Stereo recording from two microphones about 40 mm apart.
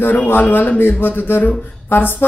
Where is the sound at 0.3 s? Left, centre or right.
Left.